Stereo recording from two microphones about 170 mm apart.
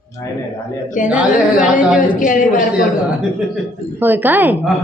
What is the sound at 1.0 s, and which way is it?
Speech, 50° left (ahead or behind).